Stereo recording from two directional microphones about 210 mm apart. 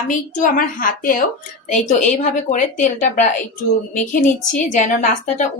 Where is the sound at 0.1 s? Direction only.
35° left (ahead or behind).